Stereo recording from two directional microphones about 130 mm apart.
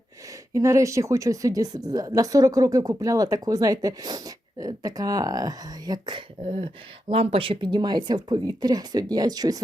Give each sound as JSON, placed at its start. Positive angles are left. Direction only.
{"t": 0.5, "sound": "a woman's voice", "side_deg": -25}